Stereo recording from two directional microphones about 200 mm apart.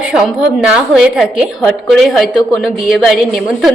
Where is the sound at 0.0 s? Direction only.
5° right (ahead or behind).